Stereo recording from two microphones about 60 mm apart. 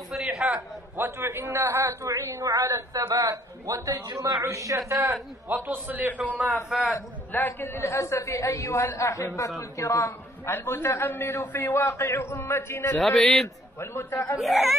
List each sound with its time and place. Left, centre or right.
0.1 s a sound: centre
0.9 s a man's voice: right
5.9 s a man's voice: right
6.7 s speech: centre
7.3 s a man's voice: left
7.6 s a woman's voice: left
10.5 s a man's voice: left
12.9 s a man's voice: centre